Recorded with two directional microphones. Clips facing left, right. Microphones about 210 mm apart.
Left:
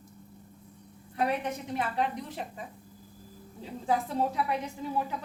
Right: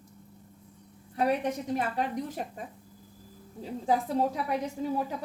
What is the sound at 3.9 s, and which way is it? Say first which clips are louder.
Speech: right 2 dB; 40° right (ahead or behind).